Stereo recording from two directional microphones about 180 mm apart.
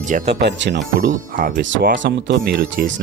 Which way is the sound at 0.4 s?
75° right (ahead or behind).